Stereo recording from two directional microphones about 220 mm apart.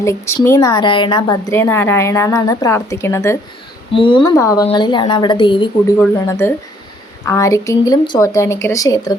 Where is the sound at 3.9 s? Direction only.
25° left (ahead or behind).